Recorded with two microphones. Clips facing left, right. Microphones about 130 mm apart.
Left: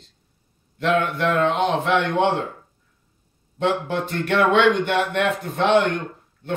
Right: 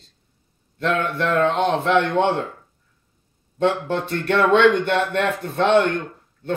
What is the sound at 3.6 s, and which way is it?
Speech, 10° left (ahead or behind).